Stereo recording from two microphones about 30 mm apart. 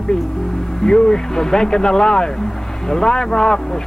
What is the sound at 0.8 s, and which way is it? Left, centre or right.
Speech, left.